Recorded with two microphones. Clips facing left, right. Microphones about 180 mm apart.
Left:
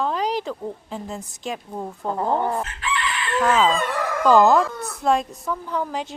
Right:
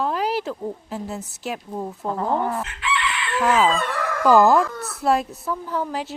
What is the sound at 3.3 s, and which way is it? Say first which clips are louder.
Crowing: even; 10° right (ahead or behind).